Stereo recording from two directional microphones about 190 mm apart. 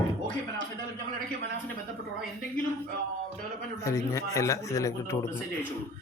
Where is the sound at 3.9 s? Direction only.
15° left (ahead or behind).